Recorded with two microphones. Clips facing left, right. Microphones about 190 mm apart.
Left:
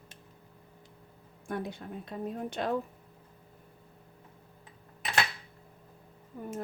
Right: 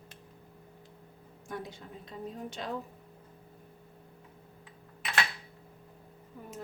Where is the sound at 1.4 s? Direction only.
60° left (ahead or behind).